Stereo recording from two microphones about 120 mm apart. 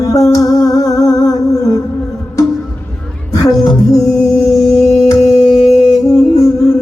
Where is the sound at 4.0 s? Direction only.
5° left (ahead or behind).